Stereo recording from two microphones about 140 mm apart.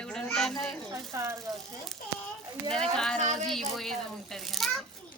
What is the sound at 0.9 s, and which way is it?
Speech, 20° right (ahead or behind).